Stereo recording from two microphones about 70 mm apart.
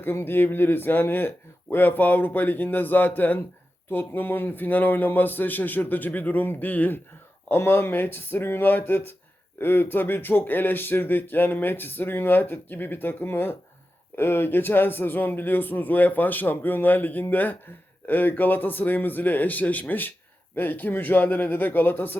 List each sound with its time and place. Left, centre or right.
0.0 s speech: left